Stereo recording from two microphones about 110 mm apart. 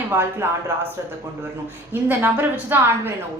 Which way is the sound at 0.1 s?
20° right (ahead or behind).